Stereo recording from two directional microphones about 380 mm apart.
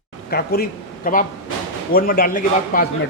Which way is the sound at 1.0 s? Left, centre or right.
Left.